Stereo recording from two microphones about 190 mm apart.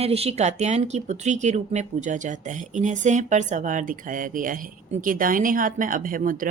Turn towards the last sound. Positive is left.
turn(degrees=-45)  # may be behind; listen again after turning